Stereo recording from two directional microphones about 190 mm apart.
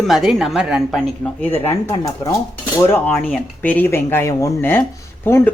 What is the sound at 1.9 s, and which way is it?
Speech, 25° left (ahead or behind).